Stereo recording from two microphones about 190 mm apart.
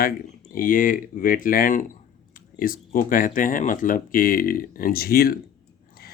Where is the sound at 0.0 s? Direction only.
45° left (ahead or behind).